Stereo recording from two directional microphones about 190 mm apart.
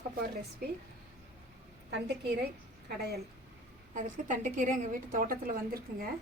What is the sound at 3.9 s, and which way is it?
A woman's voice, 45° right (ahead or behind).